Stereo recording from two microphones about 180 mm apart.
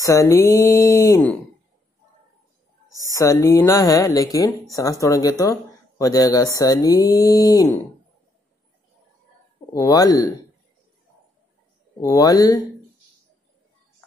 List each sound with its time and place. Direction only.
0.0 s speech: 15° left (ahead or behind)
3.1 s speech: 15° left (ahead or behind)
9.8 s speech: 20° left (ahead or behind)
12.0 s speech: 20° left (ahead or behind)